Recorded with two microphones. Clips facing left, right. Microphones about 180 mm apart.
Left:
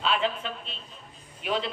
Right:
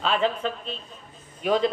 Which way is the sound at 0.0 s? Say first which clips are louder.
Right 4 dB; 40° right (ahead or behind).